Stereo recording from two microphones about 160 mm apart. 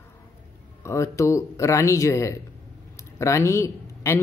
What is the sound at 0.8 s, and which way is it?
Speech, 20° left (ahead or behind).